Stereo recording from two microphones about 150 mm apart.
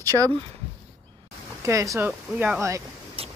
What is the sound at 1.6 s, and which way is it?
Speech, 20° right (ahead or behind).